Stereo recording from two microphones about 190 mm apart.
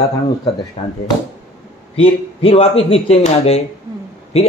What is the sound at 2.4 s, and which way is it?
Speech, 30° left (ahead or behind).